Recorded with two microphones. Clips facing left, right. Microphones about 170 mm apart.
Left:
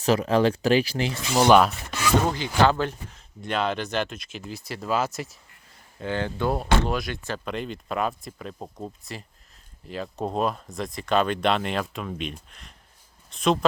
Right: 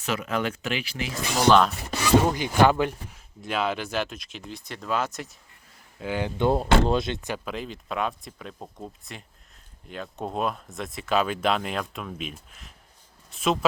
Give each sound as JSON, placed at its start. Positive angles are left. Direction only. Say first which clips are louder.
{"t": 0.0, "sound": "speech", "louder": "left 7 dB", "side_deg": 35}
{"t": 1.5, "sound": "speech", "louder": "left 1 dB", "side_deg": 10}
{"t": 2.1, "sound": "speech", "louder": "right 3 dB", "side_deg": -10}
{"t": 6.0, "sound": "speech", "louder": "right 1 dB", "side_deg": -10}
{"t": 7.4, "sound": "speech", "louder": "left 2 dB", "side_deg": 0}